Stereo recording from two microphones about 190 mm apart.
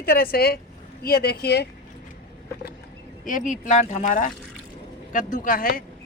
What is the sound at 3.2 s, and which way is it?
A woman's voice, 40° left (ahead or behind).